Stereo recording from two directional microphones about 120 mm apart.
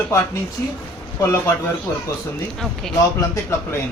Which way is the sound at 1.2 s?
20° left (ahead or behind).